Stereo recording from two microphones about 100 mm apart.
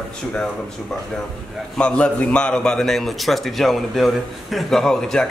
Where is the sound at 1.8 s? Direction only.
10° left (ahead or behind).